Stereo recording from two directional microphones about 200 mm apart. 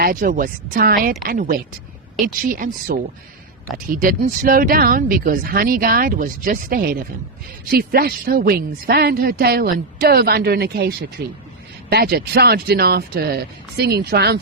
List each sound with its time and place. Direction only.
0.0 s a woman's voice: 40° right (ahead or behind)